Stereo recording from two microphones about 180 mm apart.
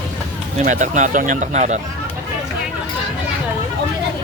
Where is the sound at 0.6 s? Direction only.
45° right (ahead or behind).